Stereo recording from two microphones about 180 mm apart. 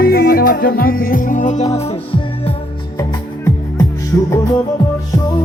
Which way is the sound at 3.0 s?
20° left (ahead or behind).